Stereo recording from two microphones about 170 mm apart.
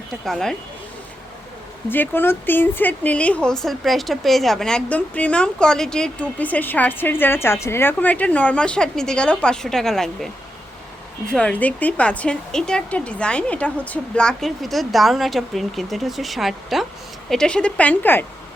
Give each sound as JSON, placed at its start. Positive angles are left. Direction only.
{"t": 0.3, "sound": "speech", "side_deg": 0}
{"t": 1.9, "sound": "speech", "side_deg": 10}
{"t": 11.3, "sound": "speech", "side_deg": 5}